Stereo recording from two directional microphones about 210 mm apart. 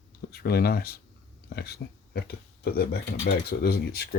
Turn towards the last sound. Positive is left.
turn(degrees=50)  # may be behind; listen again after turning